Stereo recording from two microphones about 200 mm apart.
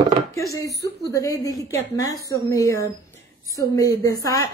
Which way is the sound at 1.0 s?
15° left (ahead or behind).